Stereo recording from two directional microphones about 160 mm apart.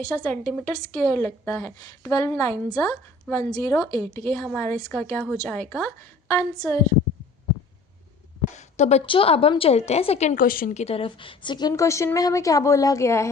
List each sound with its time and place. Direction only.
0.0 s a woman's voice: 20° left (ahead or behind)
8.5 s a woman's voice: 45° left (ahead or behind)
10.4 s speech: 60° left (ahead or behind)
10.8 s a woman's voice: 40° left (ahead or behind); by 13.3 s 15° left (ahead or behind)